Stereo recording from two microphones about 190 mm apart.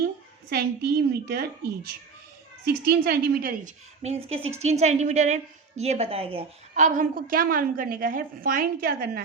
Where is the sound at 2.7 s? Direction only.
55° right (ahead or behind).